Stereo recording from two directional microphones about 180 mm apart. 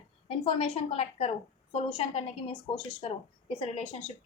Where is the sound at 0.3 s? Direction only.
30° left (ahead or behind).